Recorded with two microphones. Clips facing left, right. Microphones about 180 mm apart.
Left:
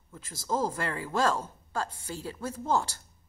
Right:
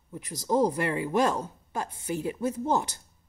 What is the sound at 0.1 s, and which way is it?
Speech, 20° right (ahead or behind).